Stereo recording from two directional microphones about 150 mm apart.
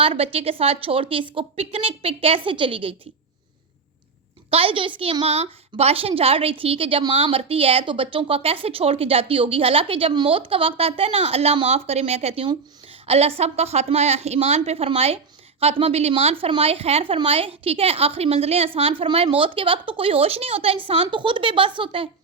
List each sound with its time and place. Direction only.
0.0 s a woman's voice: 40° right (ahead or behind)
4.5 s a woman's voice: 35° right (ahead or behind)